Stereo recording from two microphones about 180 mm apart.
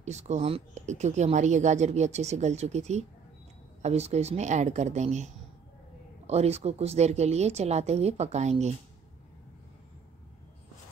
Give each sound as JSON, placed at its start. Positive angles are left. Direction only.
{"t": 0.0, "sound": "speech", "side_deg": -40}